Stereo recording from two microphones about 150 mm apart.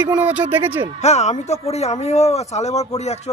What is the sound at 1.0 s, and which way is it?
A man's voice, 50° left (ahead or behind).